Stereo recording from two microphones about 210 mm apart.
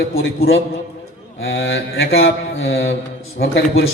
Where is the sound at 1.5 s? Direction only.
60° left (ahead or behind).